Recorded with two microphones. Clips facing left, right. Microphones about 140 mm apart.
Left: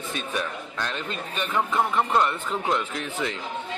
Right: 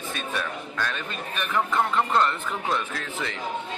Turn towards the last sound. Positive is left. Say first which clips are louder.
# left 3 dB
turn(degrees=20)  # may be behind; listen again after turning